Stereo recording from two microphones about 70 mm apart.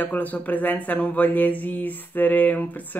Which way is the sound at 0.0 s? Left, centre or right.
Left.